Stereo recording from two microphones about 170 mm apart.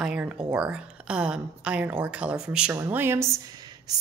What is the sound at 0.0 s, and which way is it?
A woman's voice, 5° right (ahead or behind).